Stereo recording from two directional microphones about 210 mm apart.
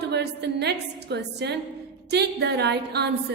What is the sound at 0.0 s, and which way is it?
A woman's voice, 55° right (ahead or behind).